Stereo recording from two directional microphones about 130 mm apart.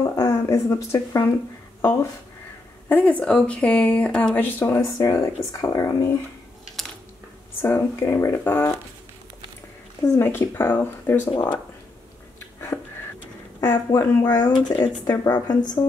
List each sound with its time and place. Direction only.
0.0 s speech: 25° left (ahead or behind)
2.9 s speech: 10° left (ahead or behind)
7.6 s speech: 20° left (ahead or behind)
10.0 s speech: 20° left (ahead or behind)
11.3 s speech: 40° left (ahead or behind)
12.4 s a sound: 20° left (ahead or behind)
13.6 s speech: 30° left (ahead or behind)